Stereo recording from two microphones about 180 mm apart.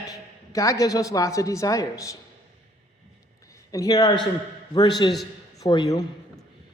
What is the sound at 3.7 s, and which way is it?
A man's voice, 20° left (ahead or behind).